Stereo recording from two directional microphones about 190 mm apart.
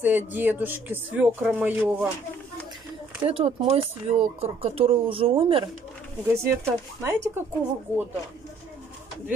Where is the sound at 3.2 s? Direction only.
30° right (ahead or behind).